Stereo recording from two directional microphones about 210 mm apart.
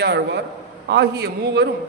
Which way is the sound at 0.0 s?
55° right (ahead or behind).